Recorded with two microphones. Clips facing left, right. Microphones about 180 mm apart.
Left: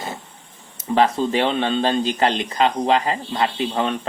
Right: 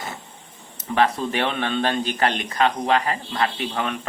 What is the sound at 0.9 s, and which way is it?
Speech, 25° left (ahead or behind).